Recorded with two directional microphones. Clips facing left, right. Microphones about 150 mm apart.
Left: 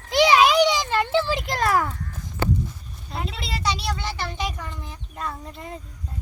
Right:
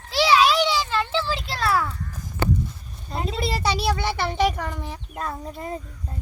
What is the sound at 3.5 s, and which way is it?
A child's voice, 60° right (ahead or behind).